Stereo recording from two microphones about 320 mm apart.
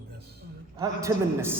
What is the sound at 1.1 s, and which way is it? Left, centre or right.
Speech, centre.